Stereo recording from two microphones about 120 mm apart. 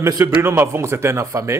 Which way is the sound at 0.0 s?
25° right (ahead or behind).